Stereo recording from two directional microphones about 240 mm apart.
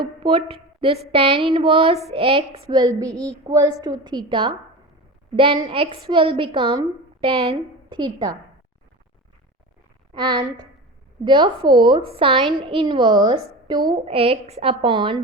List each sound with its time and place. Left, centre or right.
0.0 s a woman's voice: right
10.2 s a woman's voice: centre